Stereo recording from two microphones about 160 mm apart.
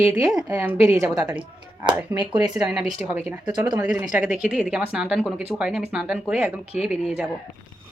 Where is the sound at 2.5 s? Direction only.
Centre (ahead or behind).